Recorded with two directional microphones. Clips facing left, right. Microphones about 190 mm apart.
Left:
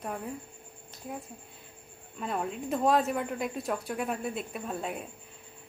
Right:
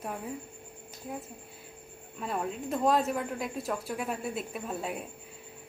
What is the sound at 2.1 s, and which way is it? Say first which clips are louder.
Speech: even; centre (ahead or behind).